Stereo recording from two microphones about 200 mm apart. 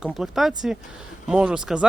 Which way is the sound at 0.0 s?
Centre (ahead or behind).